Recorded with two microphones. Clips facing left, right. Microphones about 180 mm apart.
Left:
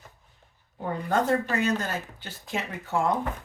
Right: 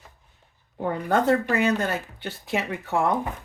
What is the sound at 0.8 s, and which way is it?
Speech, 65° right (ahead or behind).